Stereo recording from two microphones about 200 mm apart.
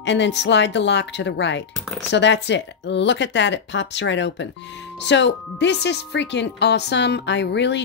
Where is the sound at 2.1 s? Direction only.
60° left (ahead or behind).